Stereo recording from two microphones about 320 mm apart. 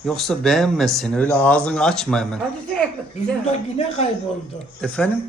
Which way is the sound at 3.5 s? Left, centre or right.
Centre.